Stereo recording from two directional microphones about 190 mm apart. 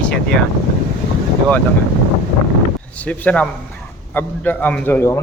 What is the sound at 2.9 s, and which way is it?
A man's voice, 5° left (ahead or behind).